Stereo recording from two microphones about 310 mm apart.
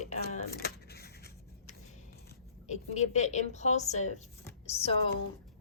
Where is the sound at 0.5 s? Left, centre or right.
Left.